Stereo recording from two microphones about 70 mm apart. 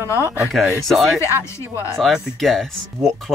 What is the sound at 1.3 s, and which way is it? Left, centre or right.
Speech, right.